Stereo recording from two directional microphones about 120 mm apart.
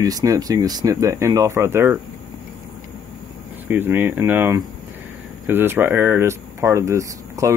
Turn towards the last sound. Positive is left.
turn(degrees=-25)  # may be behind; listen again after turning